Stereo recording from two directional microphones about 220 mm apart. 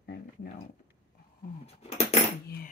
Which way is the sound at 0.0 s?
45° left (ahead or behind).